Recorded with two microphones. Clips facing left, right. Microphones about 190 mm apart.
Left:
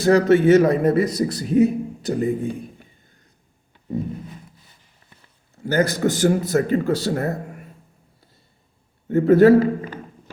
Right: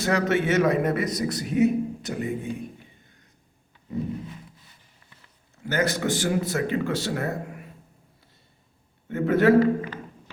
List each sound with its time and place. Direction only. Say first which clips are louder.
0.0 s speech: left 9 dB; 35° left (ahead or behind)
5.6 s speech: left 5 dB; 35° left (ahead or behind)
9.0 s speech: left 9 dB; 35° left (ahead or behind)